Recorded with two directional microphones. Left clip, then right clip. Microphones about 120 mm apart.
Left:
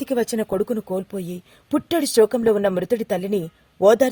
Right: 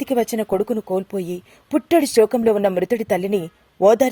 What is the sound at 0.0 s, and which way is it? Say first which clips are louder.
A woman's voice: right 2 dB; 30° right (ahead or behind).